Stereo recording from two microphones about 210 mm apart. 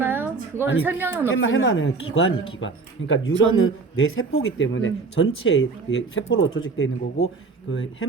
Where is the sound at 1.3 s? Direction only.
65° left (ahead or behind).